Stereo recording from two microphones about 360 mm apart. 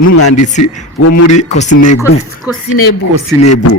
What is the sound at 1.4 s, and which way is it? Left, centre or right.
Speech, centre.